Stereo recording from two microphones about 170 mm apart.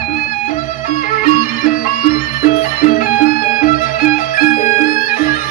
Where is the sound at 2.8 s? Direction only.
55° left (ahead or behind).